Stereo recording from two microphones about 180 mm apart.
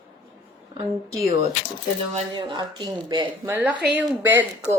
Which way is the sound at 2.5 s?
20° right (ahead or behind).